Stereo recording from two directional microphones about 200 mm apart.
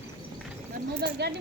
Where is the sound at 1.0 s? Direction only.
55° right (ahead or behind).